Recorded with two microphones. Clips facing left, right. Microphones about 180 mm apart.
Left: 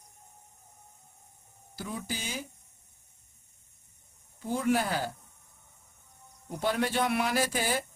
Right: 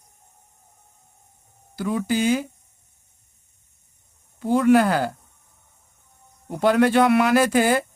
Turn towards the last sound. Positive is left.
turn(degrees=-70)  # may be behind; listen again after turning